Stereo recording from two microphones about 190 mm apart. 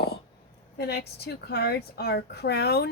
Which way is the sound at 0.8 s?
55° left (ahead or behind).